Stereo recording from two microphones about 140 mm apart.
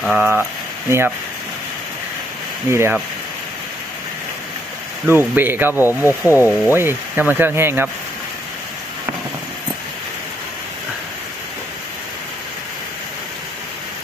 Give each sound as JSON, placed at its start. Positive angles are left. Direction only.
{"t": 0.0, "sound": "speech", "side_deg": -5}
{"t": 0.9, "sound": "speech", "side_deg": -20}
{"t": 2.7, "sound": "speech", "side_deg": -20}
{"t": 5.0, "sound": "speech", "side_deg": -15}